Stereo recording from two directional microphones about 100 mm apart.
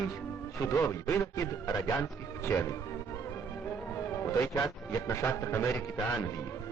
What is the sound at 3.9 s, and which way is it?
A man's voice, 30° left (ahead or behind).